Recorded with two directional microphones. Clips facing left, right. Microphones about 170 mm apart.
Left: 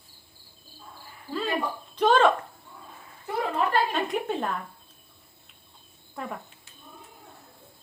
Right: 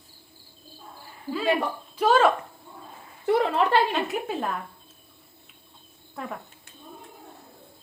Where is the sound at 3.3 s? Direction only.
80° right.